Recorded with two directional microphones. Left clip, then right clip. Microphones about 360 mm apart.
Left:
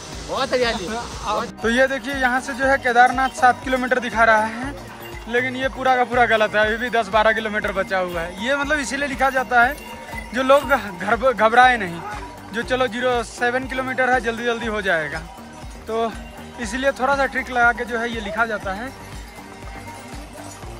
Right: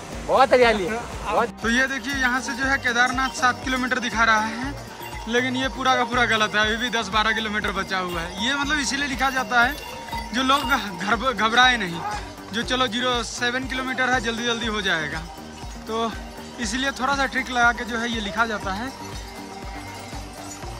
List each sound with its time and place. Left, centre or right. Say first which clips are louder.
0.3 s speech: right 5 dB; centre
1.6 s speech: left 4 dB; centre
16.5 s speech: left 4 dB; centre